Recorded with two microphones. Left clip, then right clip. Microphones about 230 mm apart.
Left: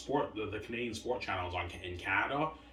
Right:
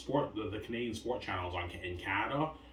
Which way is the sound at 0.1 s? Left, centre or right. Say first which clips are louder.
Even; centre.